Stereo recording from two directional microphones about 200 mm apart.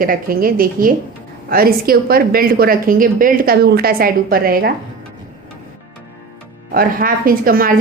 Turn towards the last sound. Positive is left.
turn(degrees=-45)  # may be behind; listen again after turning